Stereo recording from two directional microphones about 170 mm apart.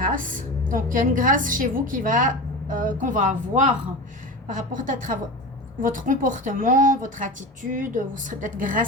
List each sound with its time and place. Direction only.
0.0 s a woman's voice: 50° right (ahead or behind)